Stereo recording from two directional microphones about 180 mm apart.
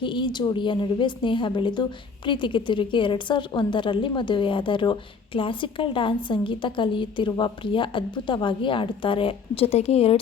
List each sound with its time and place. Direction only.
0.0 s a woman's voice: 25° left (ahead or behind)